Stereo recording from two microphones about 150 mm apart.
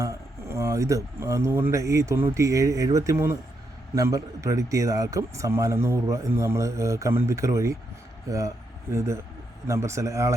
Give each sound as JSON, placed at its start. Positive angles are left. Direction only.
{"t": 0.0, "sound": "a man's voice", "side_deg": -20}